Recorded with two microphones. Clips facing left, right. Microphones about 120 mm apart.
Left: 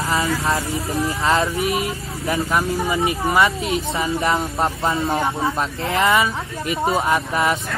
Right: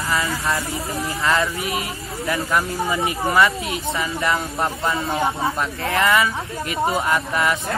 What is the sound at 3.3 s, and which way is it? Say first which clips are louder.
A man's voice: right 1 dB; 25° left (ahead or behind).